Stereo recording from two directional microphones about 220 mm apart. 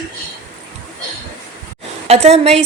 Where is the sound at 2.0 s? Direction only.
30° right (ahead or behind).